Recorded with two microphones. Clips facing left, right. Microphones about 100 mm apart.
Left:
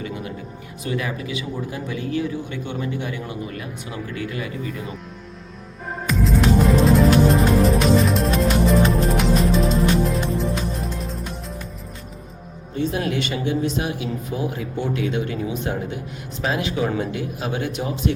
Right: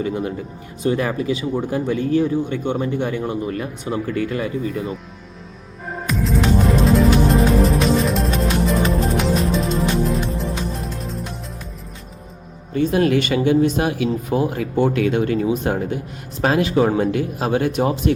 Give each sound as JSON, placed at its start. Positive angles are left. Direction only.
{"t": 0.0, "sound": "speech", "side_deg": -35}
{"t": 6.1, "sound": "music", "side_deg": 0}
{"t": 12.7, "sound": "speech", "side_deg": -55}